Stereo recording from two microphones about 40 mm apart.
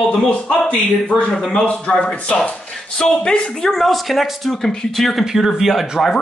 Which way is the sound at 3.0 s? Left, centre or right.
Left.